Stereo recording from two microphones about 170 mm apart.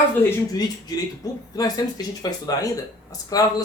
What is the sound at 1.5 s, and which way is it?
Speech, 20° left (ahead or behind).